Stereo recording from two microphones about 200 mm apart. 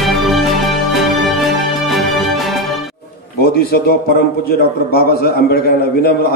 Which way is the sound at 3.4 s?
50° left (ahead or behind).